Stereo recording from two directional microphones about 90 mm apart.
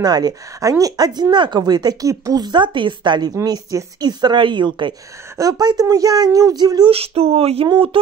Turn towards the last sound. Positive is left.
turn(degrees=-90)